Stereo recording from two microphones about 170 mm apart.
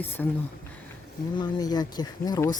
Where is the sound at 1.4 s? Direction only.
25° left (ahead or behind).